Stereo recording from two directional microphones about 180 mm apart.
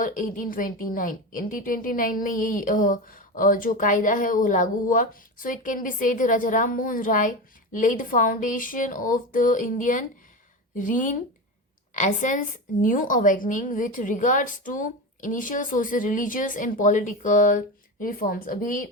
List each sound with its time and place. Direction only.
0.0 s a woman's voice: 50° left (ahead or behind)